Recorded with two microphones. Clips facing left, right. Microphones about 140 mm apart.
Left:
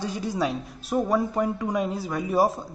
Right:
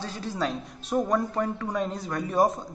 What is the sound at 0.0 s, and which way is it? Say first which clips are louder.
A man's voice: left 3 dB; 15° left (ahead or behind).